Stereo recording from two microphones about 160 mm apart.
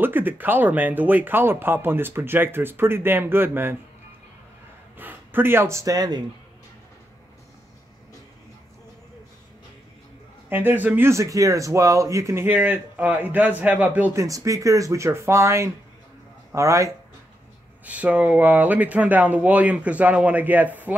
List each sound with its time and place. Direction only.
0.0 s speech: 10° right (ahead or behind)
4.9 s speech: 10° right (ahead or behind)
10.5 s speech: 10° right (ahead or behind)
14.1 s speech: 20° right (ahead or behind)
17.8 s speech: 10° right (ahead or behind)